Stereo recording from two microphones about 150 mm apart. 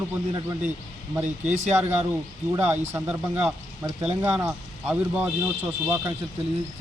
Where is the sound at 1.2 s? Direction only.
55° right (ahead or behind).